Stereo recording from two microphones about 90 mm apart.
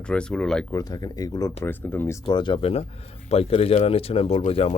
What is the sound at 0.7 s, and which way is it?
Speech, 40° left (ahead or behind).